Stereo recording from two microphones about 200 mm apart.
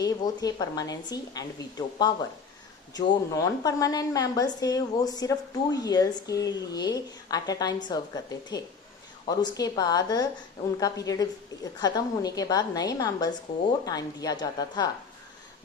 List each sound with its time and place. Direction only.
0.0 s a woman's voice: 20° left (ahead or behind)